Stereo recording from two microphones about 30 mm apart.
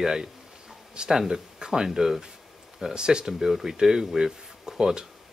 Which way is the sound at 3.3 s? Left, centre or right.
Centre.